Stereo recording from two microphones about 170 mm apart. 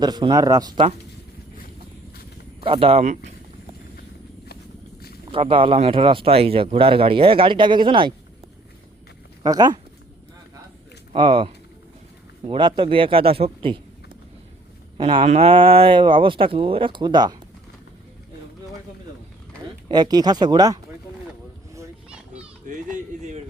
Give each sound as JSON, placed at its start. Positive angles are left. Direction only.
{"t": 0.0, "sound": "speech", "side_deg": -25}
{"t": 2.6, "sound": "speech", "side_deg": -30}
{"t": 5.3, "sound": "speech", "side_deg": -30}
{"t": 9.4, "sound": "speech", "side_deg": -25}
{"t": 11.1, "sound": "speech", "side_deg": -30}
{"t": 14.9, "sound": "speech", "side_deg": -30}
{"t": 19.9, "sound": "speech", "side_deg": -25}
{"t": 22.6, "sound": "a sound", "side_deg": -50}